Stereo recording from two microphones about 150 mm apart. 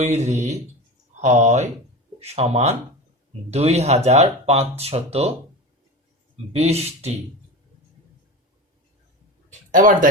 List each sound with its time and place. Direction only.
0.0 s speech: 50° right (ahead or behind)
6.3 s speech: 45° right (ahead or behind)
9.5 s a sound: 60° right (ahead or behind)